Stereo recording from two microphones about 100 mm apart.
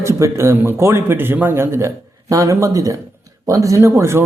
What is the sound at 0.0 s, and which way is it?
A man's voice, 30° right (ahead or behind).